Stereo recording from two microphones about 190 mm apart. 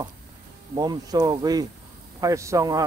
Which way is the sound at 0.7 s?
20° right (ahead or behind).